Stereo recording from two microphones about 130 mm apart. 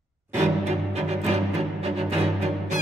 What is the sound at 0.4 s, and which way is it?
Music, 55° right (ahead or behind).